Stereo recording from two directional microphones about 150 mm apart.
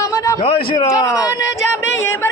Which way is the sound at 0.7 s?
25° left (ahead or behind).